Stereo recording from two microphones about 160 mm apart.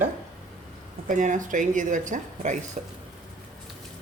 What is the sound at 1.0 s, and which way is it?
A woman's voice, 50° right (ahead or behind).